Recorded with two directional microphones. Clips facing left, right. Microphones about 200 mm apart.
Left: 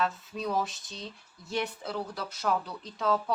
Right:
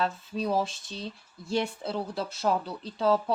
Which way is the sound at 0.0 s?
30° right (ahead or behind).